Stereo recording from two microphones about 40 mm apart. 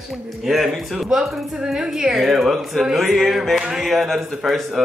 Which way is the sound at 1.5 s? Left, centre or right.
Centre.